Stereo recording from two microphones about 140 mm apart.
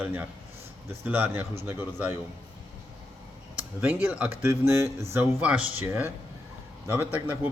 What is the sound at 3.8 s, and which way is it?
Speech, 10° right (ahead or behind).